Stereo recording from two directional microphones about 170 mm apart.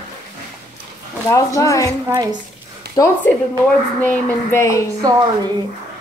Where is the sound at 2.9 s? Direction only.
70° right (ahead or behind).